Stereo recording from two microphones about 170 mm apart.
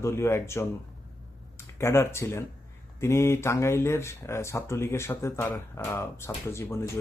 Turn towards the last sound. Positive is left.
turn(degrees=15)  # may be behind; listen again after turning